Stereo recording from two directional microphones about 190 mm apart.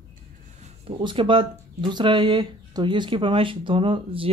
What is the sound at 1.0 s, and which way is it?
Speech, 25° right (ahead or behind).